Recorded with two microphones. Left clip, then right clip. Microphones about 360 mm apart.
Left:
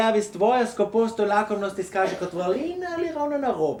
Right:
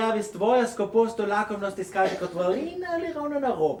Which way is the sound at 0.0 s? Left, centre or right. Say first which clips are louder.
Left 4 dB; centre.